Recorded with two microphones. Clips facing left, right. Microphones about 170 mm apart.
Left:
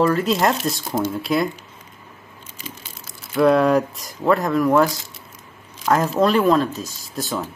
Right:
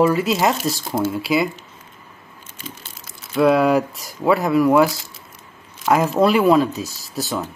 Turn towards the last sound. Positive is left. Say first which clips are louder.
# right 1 dB
turn(degrees=-5)  # may be behind; listen again after turning